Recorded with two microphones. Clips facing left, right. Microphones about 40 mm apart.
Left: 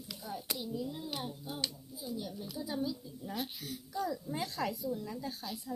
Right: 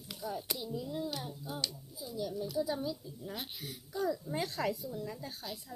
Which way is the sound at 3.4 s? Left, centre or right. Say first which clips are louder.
Left 3 dB; right.